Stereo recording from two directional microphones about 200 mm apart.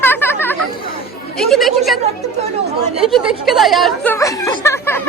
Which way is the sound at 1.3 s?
Centre (ahead or behind).